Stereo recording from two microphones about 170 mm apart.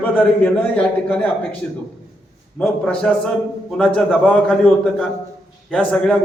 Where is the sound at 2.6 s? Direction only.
5° left (ahead or behind).